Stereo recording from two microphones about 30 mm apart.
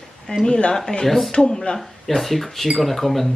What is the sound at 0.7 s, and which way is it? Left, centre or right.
Speech, centre.